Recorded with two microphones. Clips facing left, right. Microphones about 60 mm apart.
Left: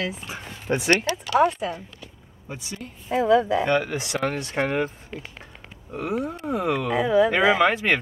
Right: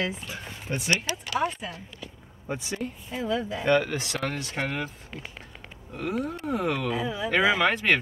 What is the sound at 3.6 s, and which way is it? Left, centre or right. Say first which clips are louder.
Speech: even; centre.